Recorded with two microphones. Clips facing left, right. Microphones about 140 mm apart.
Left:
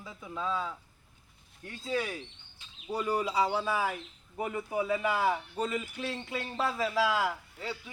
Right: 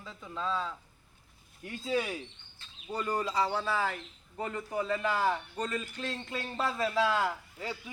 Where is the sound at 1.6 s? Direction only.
15° right (ahead or behind).